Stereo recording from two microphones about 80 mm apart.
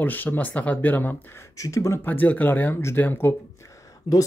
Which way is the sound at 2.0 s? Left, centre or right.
Left.